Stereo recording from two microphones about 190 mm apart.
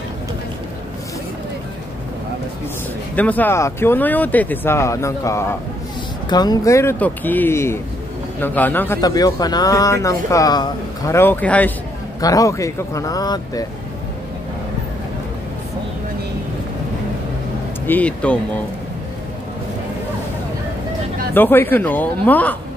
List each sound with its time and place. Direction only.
3.2 s speech: 10° left (ahead or behind)
17.8 s speech: 10° left (ahead or behind)
21.3 s speech: 10° left (ahead or behind)